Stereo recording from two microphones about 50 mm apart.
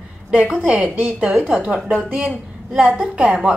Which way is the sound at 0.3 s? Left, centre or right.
Right.